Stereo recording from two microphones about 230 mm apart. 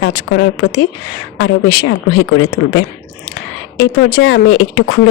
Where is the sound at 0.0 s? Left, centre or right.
Left.